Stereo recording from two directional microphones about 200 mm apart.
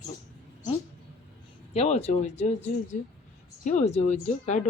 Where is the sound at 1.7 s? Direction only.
30° left (ahead or behind).